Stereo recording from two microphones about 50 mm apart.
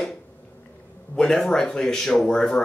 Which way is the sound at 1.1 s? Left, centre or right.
Centre.